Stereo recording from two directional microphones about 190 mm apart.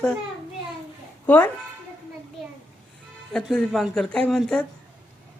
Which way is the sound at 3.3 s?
Centre (ahead or behind).